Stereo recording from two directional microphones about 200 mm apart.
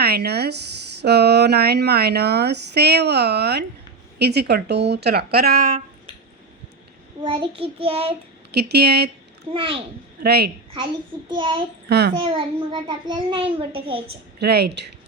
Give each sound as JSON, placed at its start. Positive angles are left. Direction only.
{"t": 0.0, "sound": "speech", "side_deg": -55}
{"t": 7.3, "sound": "a child's voice", "side_deg": -25}
{"t": 8.5, "sound": "speech", "side_deg": -55}
{"t": 9.5, "sound": "a child's voice", "side_deg": -25}
{"t": 10.2, "sound": "speech", "side_deg": -55}
{"t": 11.3, "sound": "a child's voice", "side_deg": -25}
{"t": 11.9, "sound": "speech", "side_deg": -55}
{"t": 12.1, "sound": "a child's voice", "side_deg": -25}
{"t": 14.3, "sound": "speech", "side_deg": -55}